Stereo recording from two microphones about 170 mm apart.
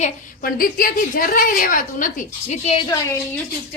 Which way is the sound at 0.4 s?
60° left (ahead or behind).